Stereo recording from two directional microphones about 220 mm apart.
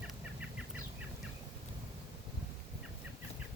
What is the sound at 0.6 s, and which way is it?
Bird, 5° right (ahead or behind).